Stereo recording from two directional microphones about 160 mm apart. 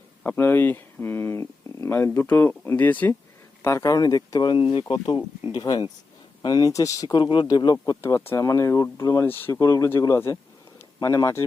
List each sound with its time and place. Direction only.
0.2 s speech: 15° left (ahead or behind)
8.0 s speech: 15° left (ahead or behind)